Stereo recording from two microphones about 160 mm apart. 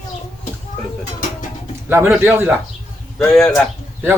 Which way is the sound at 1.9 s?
15° right (ahead or behind).